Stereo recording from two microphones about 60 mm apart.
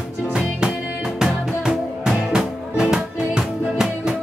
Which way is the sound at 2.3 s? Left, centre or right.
Centre.